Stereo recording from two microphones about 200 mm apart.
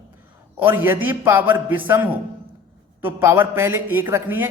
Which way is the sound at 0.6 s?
10° right (ahead or behind).